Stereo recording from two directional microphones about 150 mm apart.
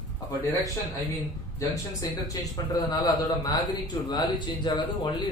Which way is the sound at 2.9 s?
25° left (ahead or behind).